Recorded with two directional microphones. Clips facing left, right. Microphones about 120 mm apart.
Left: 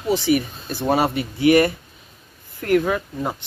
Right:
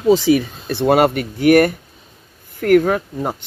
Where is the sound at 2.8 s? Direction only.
45° right (ahead or behind).